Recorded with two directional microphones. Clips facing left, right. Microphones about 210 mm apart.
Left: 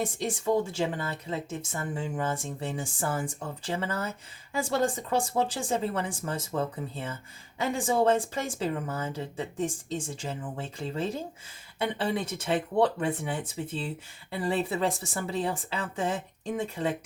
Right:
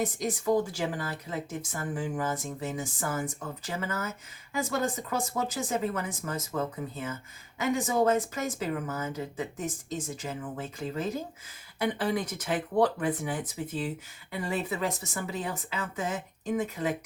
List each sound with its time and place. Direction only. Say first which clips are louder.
0.0 s speech: even; 30° left (ahead or behind)